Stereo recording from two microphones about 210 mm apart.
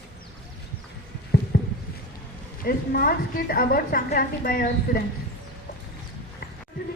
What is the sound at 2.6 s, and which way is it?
A woman's voice, 45° left (ahead or behind).